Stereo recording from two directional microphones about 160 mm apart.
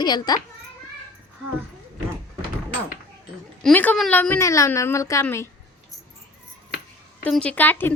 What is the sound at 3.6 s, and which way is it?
A woman's voice, 10° left (ahead or behind).